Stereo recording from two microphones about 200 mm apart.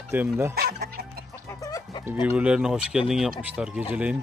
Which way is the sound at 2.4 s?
5° right (ahead or behind).